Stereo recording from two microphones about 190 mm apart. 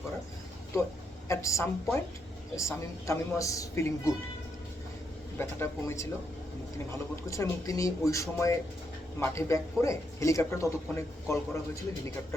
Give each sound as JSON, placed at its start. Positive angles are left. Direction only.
{"t": 1.3, "sound": "a man's voice", "side_deg": 15}
{"t": 5.4, "sound": "a man's voice", "side_deg": 15}
{"t": 7.3, "sound": "a man's voice", "side_deg": 15}